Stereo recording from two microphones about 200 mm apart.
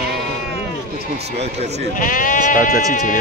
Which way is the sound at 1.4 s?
30° right (ahead or behind).